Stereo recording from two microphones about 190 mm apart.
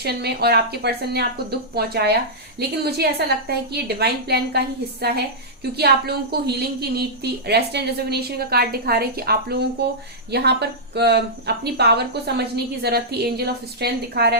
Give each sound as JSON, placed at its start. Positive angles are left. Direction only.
{"t": 0.0, "sound": "speech", "side_deg": -55}